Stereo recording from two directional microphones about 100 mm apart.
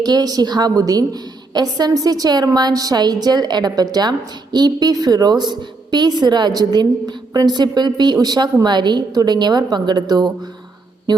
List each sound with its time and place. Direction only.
0.0 s a woman's voice: 45° right (ahead or behind)